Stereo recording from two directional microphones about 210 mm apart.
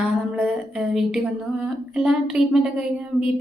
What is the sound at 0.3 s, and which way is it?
A woman's voice, centre (ahead or behind).